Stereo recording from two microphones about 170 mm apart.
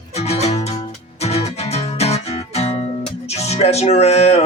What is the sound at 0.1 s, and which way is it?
Music, 40° left (ahead or behind).